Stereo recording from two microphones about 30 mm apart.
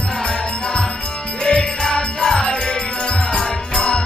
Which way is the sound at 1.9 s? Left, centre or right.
Centre.